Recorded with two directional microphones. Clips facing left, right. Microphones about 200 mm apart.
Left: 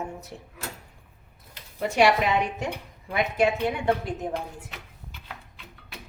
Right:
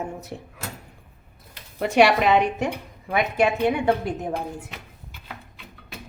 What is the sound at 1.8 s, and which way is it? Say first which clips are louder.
A woman's voice: right 3 dB; 75° right (ahead or behind).